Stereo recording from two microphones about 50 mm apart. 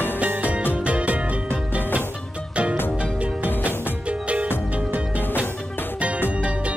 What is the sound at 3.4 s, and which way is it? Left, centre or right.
Music, right.